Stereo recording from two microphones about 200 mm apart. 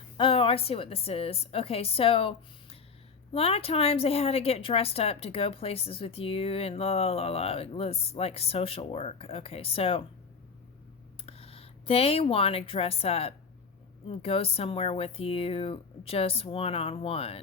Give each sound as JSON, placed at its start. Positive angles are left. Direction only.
{"t": 0.2, "sound": "a woman's voice", "side_deg": 25}
{"t": 11.3, "sound": "a woman's voice", "side_deg": 30}